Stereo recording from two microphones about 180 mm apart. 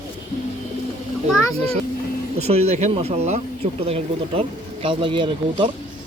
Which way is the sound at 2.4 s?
35° right (ahead or behind).